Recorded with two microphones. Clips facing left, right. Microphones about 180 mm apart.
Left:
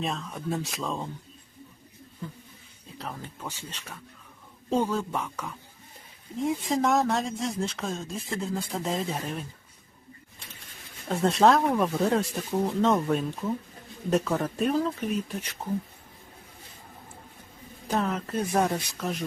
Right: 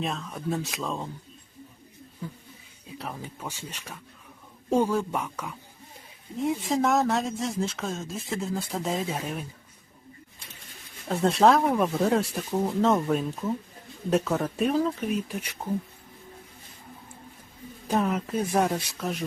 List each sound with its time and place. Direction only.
0.0 s speech: centre (ahead or behind)
3.0 s speech: 10° right (ahead or behind)
11.1 s speech: centre (ahead or behind)
17.8 s speech: 10° right (ahead or behind)